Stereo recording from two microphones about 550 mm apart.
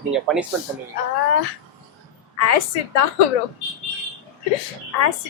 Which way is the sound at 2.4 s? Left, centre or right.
Left.